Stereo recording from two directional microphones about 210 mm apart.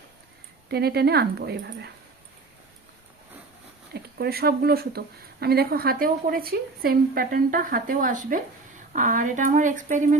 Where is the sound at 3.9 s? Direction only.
50° right (ahead or behind).